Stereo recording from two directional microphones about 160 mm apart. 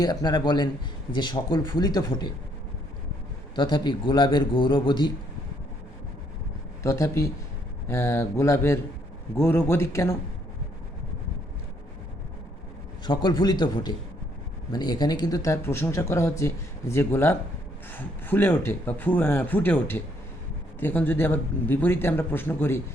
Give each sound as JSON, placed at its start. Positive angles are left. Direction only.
{"t": 0.0, "sound": "speech", "side_deg": 25}
{"t": 3.5, "sound": "a man's voice", "side_deg": 30}
{"t": 6.8, "sound": "speech", "side_deg": 15}
{"t": 13.1, "sound": "speech", "side_deg": 30}